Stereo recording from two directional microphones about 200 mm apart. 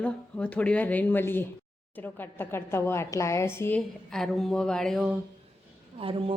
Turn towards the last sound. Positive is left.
turn(degrees=-25)  # may be behind; listen again after turning